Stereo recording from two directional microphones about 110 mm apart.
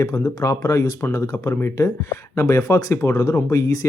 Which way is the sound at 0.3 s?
30° left (ahead or behind).